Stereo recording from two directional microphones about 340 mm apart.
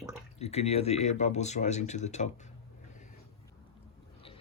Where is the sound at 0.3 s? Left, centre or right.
Centre.